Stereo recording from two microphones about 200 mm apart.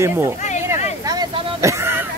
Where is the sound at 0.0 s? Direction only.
10° right (ahead or behind).